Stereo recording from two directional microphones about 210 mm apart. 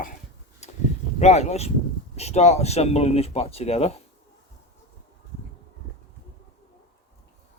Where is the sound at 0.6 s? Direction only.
35° left (ahead or behind).